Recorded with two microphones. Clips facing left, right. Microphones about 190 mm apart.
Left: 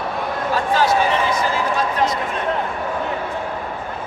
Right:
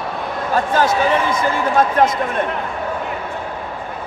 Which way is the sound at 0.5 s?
50° right (ahead or behind).